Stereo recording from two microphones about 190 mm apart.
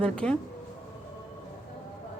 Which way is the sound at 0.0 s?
5° left (ahead or behind).